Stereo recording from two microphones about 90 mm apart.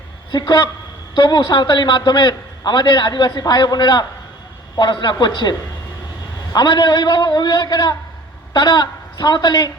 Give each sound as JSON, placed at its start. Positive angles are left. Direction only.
{"t": 0.3, "sound": "a man's voice", "side_deg": 55}